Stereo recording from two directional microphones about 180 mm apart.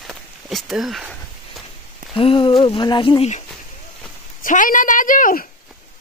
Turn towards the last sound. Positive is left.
turn(degrees=50)  # may be behind; listen again after turning